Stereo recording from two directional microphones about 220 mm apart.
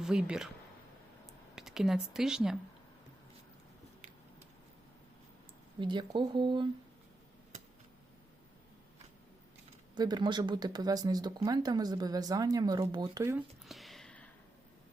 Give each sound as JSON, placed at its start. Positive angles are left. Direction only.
{"t": 0.0, "sound": "speech", "side_deg": -5}
{"t": 1.5, "sound": "speech", "side_deg": 0}
{"t": 5.8, "sound": "speech", "side_deg": -20}
{"t": 9.9, "sound": "speech", "side_deg": -20}
{"t": 13.7, "sound": "a sound", "side_deg": 0}